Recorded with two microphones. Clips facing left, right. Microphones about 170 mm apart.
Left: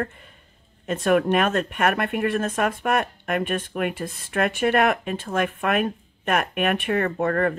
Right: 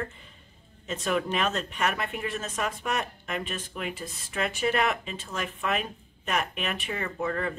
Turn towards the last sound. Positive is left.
turn(degrees=60)  # may be behind; listen again after turning